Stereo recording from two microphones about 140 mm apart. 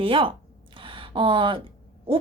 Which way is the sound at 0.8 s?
40° right (ahead or behind).